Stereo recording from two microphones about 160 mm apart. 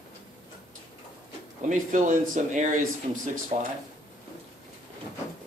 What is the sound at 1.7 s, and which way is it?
Speech, 55° right (ahead or behind).